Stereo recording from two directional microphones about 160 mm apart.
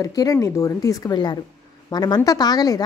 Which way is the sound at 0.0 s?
25° left (ahead or behind).